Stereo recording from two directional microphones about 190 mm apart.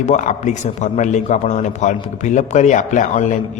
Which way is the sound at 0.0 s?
40° left (ahead or behind).